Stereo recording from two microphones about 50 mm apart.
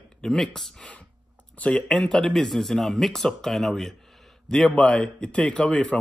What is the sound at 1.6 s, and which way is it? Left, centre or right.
A man's voice, left.